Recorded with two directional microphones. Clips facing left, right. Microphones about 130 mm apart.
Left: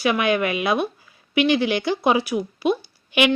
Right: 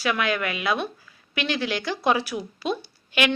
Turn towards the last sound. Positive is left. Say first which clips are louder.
# left 4 dB
turn(degrees=15)  # may be behind; listen again after turning